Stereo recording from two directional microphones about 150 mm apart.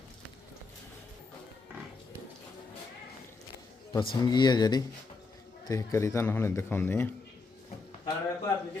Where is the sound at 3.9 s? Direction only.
30° left (ahead or behind).